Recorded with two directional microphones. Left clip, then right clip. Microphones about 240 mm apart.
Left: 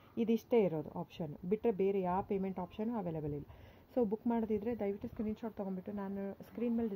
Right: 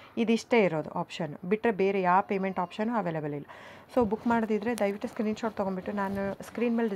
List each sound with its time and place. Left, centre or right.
0.2 s a woman's voice: centre
0.9 s speech: right
1.5 s a woman's voice: centre
4.3 s a woman's voice: centre